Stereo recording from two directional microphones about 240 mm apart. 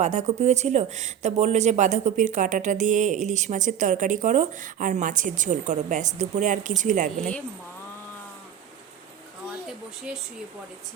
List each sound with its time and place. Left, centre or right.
0.0 s speech: right